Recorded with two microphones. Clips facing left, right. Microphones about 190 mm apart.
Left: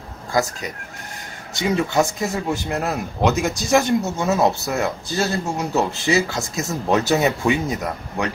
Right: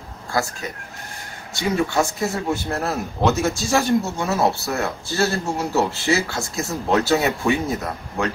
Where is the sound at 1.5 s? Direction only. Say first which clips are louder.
Left 1 dB; 20° left (ahead or behind).